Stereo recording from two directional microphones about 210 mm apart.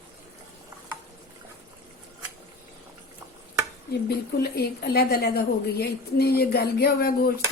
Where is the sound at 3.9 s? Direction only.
50° left (ahead or behind).